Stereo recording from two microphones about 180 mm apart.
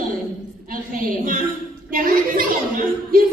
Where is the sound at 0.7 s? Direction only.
50° right (ahead or behind).